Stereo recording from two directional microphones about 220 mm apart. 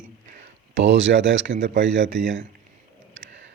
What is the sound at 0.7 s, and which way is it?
Speech, 55° right (ahead or behind).